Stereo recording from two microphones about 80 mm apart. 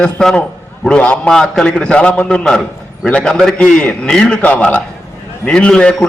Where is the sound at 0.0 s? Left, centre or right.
Centre.